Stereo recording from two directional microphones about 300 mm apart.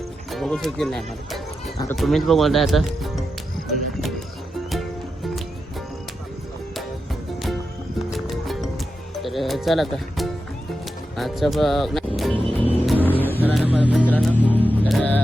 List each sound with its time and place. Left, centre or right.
0.3 s speech: centre
3.7 s music: centre
6.7 s music: centre
9.2 s speech: centre
12.5 s music: centre
12.8 s vehicle: centre
13.4 s speech: centre